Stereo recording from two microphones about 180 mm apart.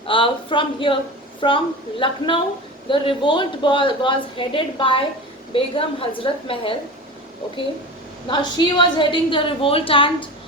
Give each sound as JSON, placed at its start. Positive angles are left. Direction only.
{"t": 0.1, "sound": "a woman's voice", "side_deg": 30}
{"t": 8.3, "sound": "a woman's voice", "side_deg": 25}